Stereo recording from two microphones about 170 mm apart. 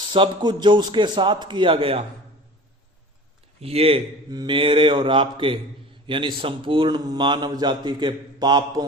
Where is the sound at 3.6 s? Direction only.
35° right (ahead or behind).